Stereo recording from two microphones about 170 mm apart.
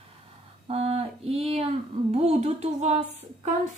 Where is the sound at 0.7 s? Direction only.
35° right (ahead or behind).